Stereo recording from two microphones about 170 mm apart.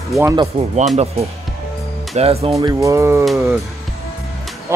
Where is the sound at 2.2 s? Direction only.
35° right (ahead or behind).